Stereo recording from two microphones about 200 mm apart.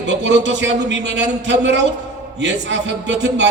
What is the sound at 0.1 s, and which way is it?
Speech, 60° right (ahead or behind).